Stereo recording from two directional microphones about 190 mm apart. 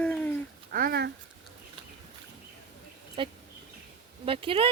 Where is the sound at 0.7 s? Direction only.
50° right (ahead or behind).